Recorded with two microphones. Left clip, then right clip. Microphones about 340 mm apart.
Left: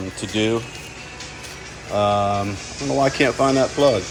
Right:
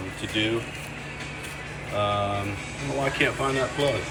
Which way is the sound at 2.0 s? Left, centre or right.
Centre.